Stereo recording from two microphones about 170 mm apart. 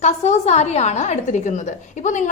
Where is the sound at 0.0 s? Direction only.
40° left (ahead or behind).